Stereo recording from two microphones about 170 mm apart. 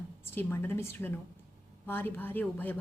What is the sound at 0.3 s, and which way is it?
A woman's voice, 15° left (ahead or behind).